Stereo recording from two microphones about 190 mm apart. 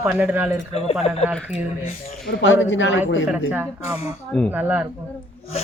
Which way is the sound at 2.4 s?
75° left (ahead or behind).